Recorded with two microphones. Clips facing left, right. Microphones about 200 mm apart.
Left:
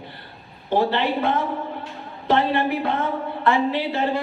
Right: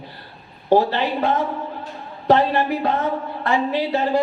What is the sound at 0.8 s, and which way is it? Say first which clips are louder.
Speech: left 2 dB; 60° left (ahead or behind).